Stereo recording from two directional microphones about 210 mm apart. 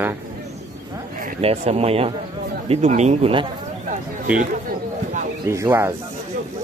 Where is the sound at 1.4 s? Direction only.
30° right (ahead or behind).